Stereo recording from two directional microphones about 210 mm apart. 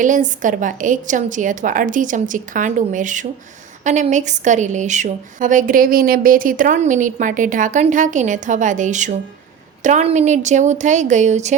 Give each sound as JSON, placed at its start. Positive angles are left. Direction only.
{"t": 0.0, "sound": "a woman's voice", "side_deg": -35}